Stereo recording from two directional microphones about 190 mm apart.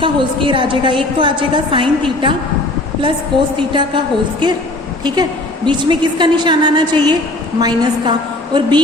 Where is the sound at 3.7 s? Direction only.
25° right (ahead or behind).